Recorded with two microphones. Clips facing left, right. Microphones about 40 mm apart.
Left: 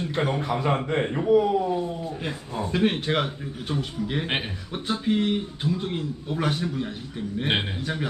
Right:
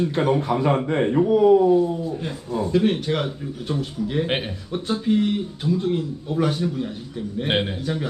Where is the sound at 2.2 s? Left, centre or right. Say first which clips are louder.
Right 4 dB; left.